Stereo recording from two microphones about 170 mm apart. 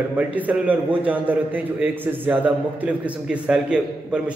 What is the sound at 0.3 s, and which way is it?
A man's voice, 10° right (ahead or behind).